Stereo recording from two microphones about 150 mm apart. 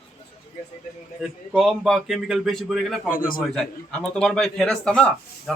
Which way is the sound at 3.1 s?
70° left (ahead or behind).